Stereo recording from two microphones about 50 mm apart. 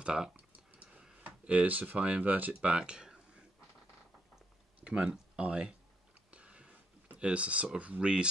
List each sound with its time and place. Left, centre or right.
0.0 s speech: centre
1.2 s speech: right
2.7 s speech: right
4.8 s speech: right
6.3 s a sound: right
8.0 s speech: right